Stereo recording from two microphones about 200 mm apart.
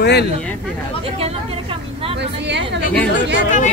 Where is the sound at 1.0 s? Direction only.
30° right (ahead or behind).